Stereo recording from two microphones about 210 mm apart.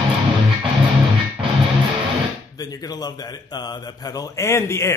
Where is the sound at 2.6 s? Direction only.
15° left (ahead or behind).